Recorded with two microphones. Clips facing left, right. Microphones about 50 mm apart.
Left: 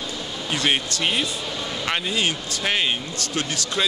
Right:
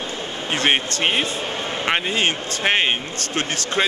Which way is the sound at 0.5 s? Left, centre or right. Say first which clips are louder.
Right 3 dB; right.